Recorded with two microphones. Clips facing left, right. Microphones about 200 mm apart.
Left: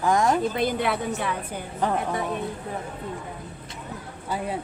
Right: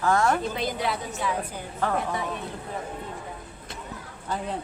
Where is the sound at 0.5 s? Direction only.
60° left (ahead or behind).